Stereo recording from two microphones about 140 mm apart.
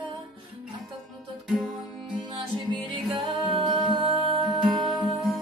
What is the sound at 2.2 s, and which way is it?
Music, 35° right (ahead or behind).